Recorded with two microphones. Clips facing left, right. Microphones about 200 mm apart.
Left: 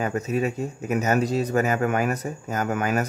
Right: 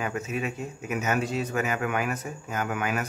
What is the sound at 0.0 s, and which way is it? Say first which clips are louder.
Speech: left 6 dB; 40° left (ahead or behind).